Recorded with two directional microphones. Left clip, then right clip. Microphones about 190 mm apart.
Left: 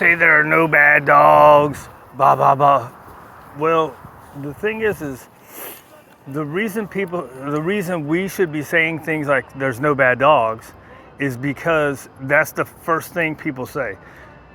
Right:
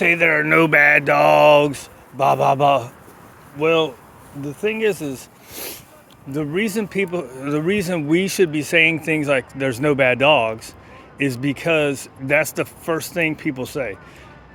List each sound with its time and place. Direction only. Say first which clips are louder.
0.0 s speech: left 3 dB; 35° right (ahead or behind)
0.6 s speech: even; 45° right (ahead or behind)
0.9 s speech: left 3 dB; 25° right (ahead or behind)
4.4 s speech: even; 20° right (ahead or behind)
6.3 s speech: even; 30° right (ahead or behind)
7.4 s speech: right 1 dB; 35° right (ahead or behind)
8.3 s speech: right 2 dB; 50° right (ahead or behind)
9.1 s speech: left 1 dB; 30° right (ahead or behind)